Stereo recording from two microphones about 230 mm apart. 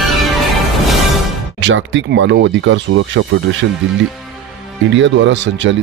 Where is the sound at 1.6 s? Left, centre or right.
Right.